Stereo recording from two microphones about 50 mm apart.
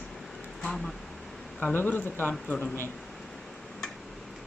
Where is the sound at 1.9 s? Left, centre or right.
Left.